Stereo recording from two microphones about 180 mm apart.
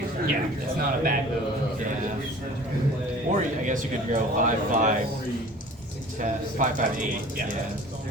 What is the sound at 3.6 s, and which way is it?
Speech, 45° right (ahead or behind).